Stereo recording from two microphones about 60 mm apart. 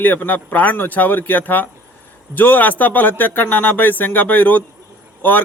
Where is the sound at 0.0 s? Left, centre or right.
Left.